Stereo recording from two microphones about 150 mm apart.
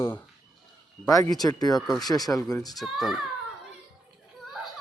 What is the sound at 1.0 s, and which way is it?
Speech, 20° left (ahead or behind).